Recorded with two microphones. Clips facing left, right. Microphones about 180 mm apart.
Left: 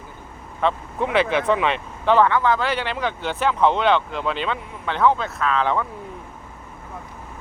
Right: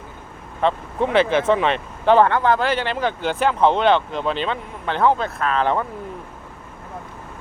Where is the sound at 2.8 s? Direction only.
35° right (ahead or behind).